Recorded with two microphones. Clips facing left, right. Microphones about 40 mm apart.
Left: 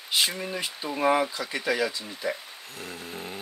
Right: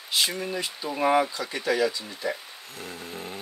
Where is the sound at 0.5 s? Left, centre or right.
Left.